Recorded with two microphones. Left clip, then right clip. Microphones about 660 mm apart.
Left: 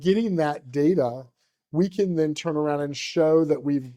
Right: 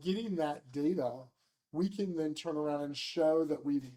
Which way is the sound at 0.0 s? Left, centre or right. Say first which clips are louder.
Left 12 dB; left.